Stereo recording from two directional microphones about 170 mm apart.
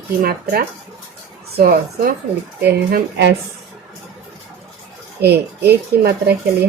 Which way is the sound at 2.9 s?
85° right.